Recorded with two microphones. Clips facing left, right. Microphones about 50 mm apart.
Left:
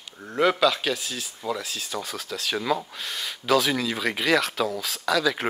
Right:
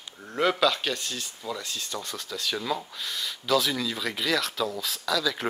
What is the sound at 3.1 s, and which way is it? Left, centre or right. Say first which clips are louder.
Speech: left 1 dB; left.